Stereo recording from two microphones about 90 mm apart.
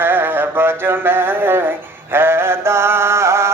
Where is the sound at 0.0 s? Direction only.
25° right (ahead or behind).